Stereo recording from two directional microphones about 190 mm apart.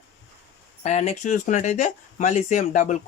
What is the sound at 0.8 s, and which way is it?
Speech, 35° left (ahead or behind).